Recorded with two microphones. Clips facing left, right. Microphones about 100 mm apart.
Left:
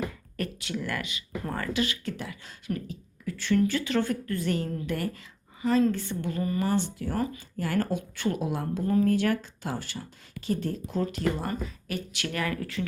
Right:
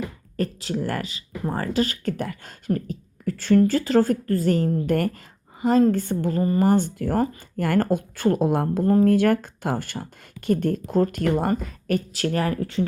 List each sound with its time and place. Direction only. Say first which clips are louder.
0.3 s speech: right 7 dB; 35° right (ahead or behind)
4.9 s speech: right 8 dB; 55° right (ahead or behind)
5.6 s speech: right 6 dB; 40° right (ahead or behind)
6.7 s speech: right 7 dB; 45° right (ahead or behind); by 12.8 s 30° right (ahead or behind)